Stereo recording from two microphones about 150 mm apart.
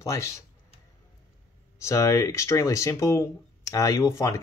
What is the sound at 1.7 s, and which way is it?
Speech, 20° left (ahead or behind).